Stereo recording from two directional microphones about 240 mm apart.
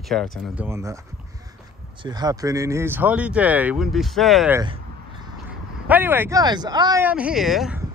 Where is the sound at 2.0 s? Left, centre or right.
Centre.